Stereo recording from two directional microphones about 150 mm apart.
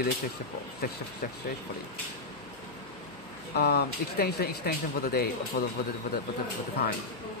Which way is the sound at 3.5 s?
90° left.